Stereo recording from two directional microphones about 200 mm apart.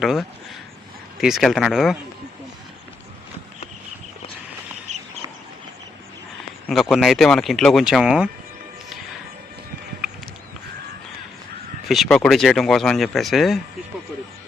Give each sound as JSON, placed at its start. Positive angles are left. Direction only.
{"t": 0.0, "sound": "speech", "side_deg": 0}
{"t": 4.9, "sound": "a sound", "side_deg": -35}
{"t": 6.7, "sound": "speech", "side_deg": 0}
{"t": 11.9, "sound": "speech", "side_deg": 0}